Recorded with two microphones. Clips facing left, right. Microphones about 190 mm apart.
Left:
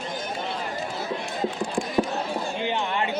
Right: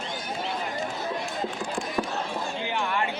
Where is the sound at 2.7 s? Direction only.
20° left (ahead or behind).